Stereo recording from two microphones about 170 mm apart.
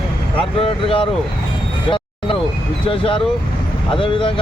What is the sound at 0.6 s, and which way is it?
Speech, 30° left (ahead or behind).